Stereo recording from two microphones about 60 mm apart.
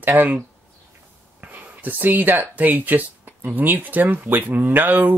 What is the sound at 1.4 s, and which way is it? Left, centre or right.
Speech, right.